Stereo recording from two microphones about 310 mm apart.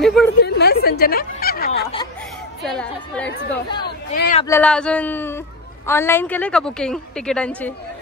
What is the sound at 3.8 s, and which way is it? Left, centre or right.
Speech, left.